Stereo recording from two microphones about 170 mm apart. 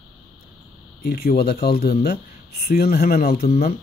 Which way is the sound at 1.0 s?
65° left (ahead or behind).